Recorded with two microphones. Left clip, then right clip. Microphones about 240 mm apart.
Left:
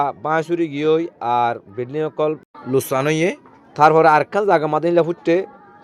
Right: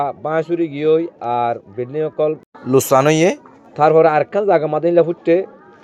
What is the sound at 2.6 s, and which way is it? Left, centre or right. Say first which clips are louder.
Speech: right 6 dB; centre.